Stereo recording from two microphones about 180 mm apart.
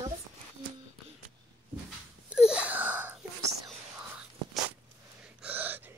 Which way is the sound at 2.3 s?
5° right (ahead or behind).